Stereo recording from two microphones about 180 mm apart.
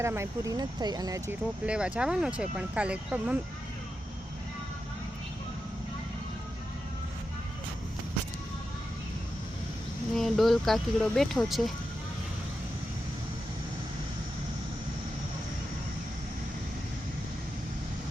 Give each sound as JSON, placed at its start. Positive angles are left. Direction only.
{"t": 0.0, "sound": "speech", "side_deg": -15}
{"t": 1.6, "sound": "speech", "side_deg": -5}
{"t": 10.2, "sound": "speech", "side_deg": 0}